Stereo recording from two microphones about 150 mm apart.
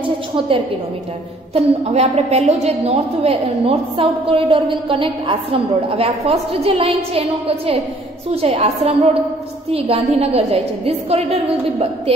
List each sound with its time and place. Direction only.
1.5 s a woman's voice: 45° right (ahead or behind)